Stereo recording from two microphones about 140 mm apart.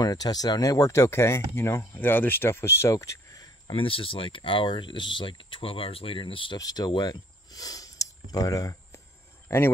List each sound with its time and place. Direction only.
0.0 s speech: 25° left (ahead or behind)
3.7 s speech: 40° left (ahead or behind)